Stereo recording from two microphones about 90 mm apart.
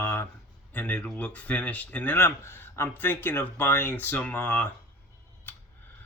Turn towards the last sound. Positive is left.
turn(degrees=25)  # may be behind; listen again after turning